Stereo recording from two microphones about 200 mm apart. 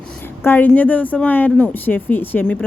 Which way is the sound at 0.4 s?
10° left (ahead or behind).